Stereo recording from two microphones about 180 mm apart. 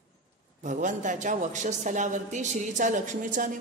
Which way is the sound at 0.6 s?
45° right (ahead or behind).